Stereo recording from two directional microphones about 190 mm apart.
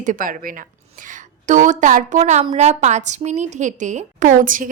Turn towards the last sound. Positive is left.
turn(degrees=-45)  # may be behind; listen again after turning